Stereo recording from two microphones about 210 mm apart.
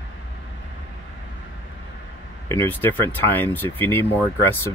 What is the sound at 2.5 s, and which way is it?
Speech, 10° left (ahead or behind).